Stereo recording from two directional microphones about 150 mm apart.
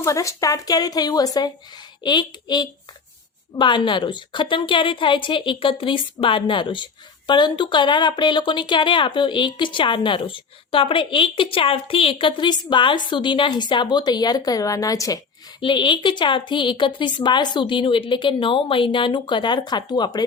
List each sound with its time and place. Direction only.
0.0 s a woman's voice: 20° left (ahead or behind)